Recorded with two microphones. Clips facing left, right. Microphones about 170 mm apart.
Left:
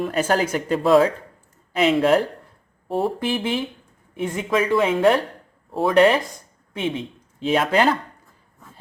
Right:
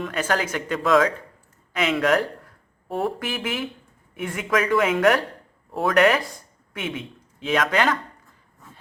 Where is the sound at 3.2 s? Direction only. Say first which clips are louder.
Left 5 dB; 30° left (ahead or behind).